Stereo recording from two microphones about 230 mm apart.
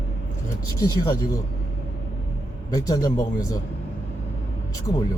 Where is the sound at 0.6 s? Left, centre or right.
Centre.